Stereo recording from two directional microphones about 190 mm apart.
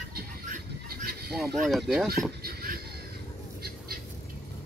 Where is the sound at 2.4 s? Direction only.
55° right (ahead or behind).